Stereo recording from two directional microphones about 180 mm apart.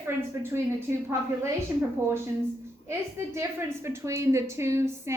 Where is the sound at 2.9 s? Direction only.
15° right (ahead or behind).